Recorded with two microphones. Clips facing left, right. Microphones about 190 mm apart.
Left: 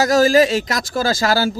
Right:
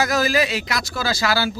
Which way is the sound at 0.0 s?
40° left (ahead or behind).